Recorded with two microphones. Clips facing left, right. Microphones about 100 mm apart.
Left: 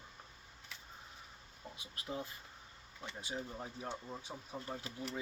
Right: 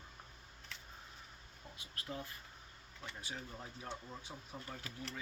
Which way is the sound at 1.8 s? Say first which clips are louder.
Left 3 dB; 20° left (ahead or behind).